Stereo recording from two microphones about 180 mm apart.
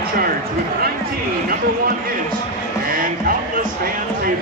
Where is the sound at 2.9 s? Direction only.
50° right (ahead or behind).